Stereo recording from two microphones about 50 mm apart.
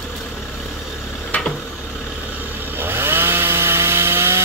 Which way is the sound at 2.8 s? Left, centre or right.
Right.